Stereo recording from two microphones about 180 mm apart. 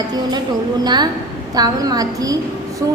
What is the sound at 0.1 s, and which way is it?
A woman's voice, 20° right (ahead or behind).